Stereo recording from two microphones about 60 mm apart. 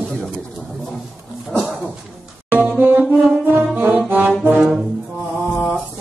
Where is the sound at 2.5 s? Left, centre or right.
Right.